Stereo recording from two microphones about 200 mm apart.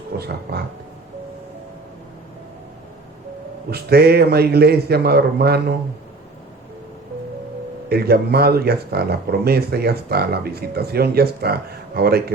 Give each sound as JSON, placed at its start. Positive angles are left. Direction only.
{"t": 0.2, "sound": "speech", "side_deg": -50}
{"t": 3.7, "sound": "speech", "side_deg": -50}
{"t": 7.9, "sound": "speech", "side_deg": -50}